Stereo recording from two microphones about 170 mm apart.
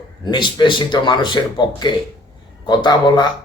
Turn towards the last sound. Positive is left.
turn(degrees=25)  # may be behind; listen again after turning